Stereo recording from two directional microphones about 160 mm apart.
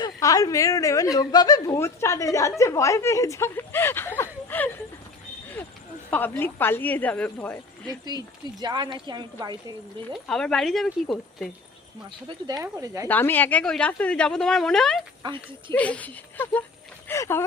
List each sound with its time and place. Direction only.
0.0 s a woman's voice: 20° left (ahead or behind)
6.1 s speech: 10° left (ahead or behind)
8.6 s a woman's voice: 25° right (ahead or behind)
10.1 s speech: 5° left (ahead or behind)
12.6 s a woman's voice: 15° right (ahead or behind)
13.1 s speech: 10° left (ahead or behind)